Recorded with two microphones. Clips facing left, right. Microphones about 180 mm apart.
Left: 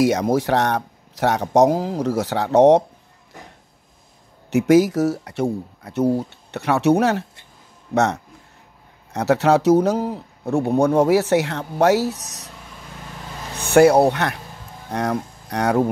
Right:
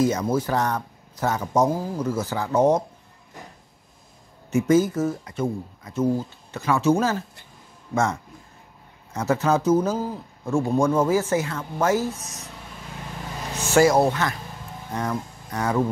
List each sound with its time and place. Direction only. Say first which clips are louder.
0.0 s speech: left 4 dB; 75° left (ahead or behind)
4.5 s speech: left 4 dB; 75° left (ahead or behind)
13.6 s speech: left 5 dB; 60° left (ahead or behind)